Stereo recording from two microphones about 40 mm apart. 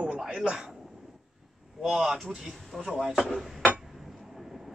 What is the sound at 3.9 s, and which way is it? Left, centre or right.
Chink, centre.